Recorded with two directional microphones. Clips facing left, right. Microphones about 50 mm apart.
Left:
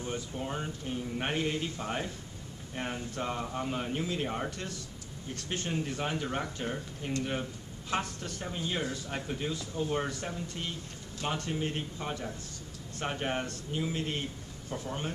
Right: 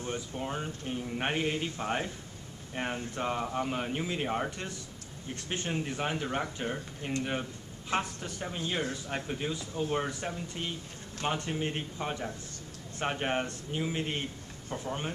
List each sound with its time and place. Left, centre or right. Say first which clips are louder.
0.0 s speech: right 1 dB; centre